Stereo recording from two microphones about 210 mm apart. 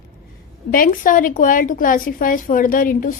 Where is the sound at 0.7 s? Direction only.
40° left (ahead or behind).